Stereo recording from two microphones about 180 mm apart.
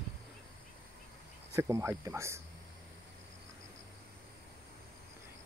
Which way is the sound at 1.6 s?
15° right (ahead or behind).